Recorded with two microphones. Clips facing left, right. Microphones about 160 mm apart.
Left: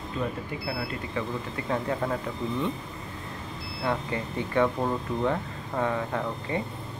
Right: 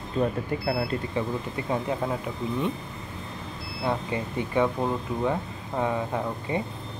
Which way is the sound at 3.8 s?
15° right (ahead or behind).